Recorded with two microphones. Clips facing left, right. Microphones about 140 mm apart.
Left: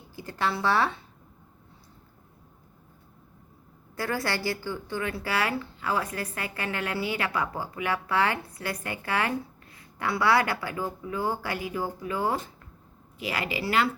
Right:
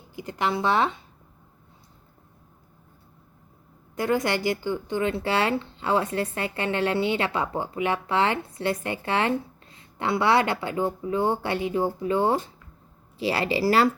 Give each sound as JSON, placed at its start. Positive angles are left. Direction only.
{"t": 0.2, "sound": "speech", "side_deg": -20}
{"t": 3.9, "sound": "a woman's voice", "side_deg": -20}